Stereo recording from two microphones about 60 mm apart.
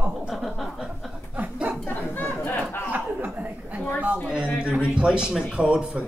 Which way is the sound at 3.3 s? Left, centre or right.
Right.